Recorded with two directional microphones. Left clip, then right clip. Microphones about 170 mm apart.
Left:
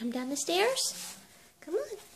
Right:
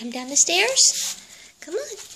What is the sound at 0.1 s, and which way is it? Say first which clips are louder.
Speech: right 11 dB; 10° left (ahead or behind).